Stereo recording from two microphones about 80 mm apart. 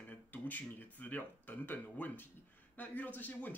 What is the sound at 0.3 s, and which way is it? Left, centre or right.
Speech, left.